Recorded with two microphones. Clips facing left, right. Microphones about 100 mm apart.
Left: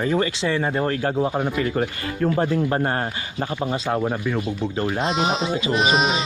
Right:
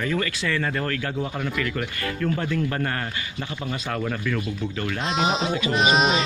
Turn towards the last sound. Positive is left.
turn(degrees=0)  # may be behind; listen again after turning